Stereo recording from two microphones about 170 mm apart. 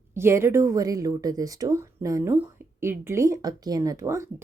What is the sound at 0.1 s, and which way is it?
Speech, 15° right (ahead or behind).